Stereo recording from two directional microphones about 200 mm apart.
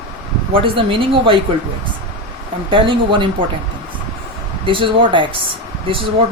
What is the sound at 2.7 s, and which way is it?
Speech, 25° right (ahead or behind).